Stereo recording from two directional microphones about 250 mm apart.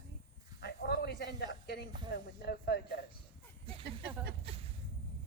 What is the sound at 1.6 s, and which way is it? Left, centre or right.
Speech, left.